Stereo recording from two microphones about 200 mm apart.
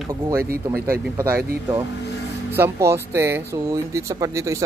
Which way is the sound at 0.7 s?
50° right (ahead or behind).